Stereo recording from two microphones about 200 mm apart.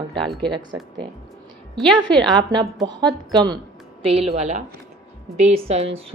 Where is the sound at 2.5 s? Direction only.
20° right (ahead or behind).